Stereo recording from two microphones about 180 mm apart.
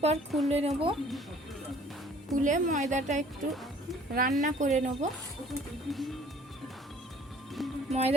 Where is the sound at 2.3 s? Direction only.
45° right (ahead or behind).